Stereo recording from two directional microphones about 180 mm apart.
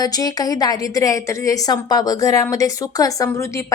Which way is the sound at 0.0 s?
20° left (ahead or behind).